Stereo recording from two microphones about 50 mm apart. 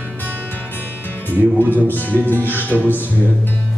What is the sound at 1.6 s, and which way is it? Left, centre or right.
Speech, right.